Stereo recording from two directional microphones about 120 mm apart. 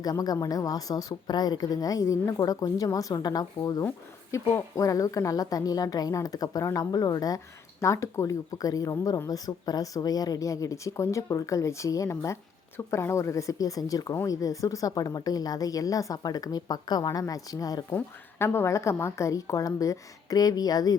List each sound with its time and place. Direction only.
0.0 s speech: 30° left (ahead or behind)
17.9 s speech: 20° left (ahead or behind)